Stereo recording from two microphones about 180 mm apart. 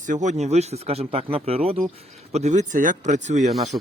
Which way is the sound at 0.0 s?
45° right (ahead or behind).